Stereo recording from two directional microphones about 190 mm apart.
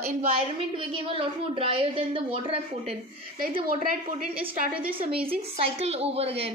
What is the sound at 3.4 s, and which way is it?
Speech, 50° right (ahead or behind).